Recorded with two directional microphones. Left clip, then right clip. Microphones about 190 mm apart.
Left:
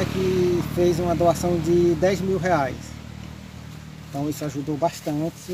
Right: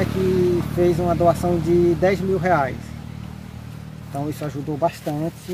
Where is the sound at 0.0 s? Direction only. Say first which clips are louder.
Right 2 dB; 60° right (ahead or behind).